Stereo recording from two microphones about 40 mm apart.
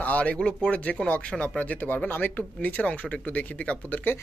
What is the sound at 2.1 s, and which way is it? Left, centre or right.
Speech, left.